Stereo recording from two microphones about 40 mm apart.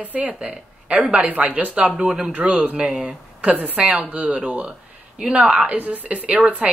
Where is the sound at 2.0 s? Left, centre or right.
Centre.